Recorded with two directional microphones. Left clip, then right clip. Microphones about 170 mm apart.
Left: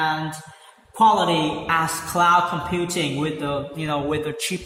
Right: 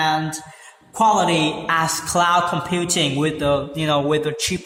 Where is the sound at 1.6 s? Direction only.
30° right (ahead or behind).